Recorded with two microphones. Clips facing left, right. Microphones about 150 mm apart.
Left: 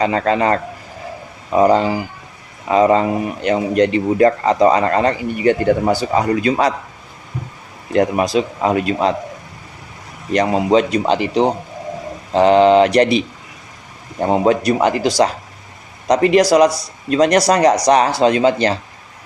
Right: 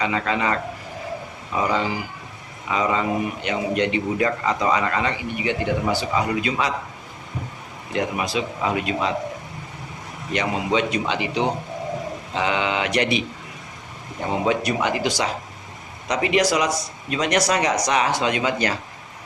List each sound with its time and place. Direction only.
0.0 s speech: 40° left (ahead or behind)
7.9 s speech: 40° left (ahead or behind)
10.3 s speech: 40° left (ahead or behind)